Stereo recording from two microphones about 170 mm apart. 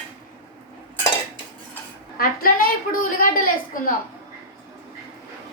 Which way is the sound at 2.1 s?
60° left (ahead or behind).